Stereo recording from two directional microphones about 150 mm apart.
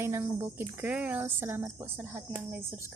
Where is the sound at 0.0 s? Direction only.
15° right (ahead or behind).